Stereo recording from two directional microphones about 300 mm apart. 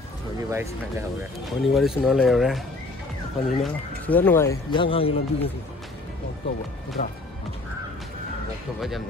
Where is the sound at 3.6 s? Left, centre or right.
Centre.